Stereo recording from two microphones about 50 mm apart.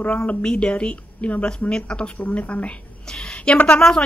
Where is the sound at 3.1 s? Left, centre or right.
Centre.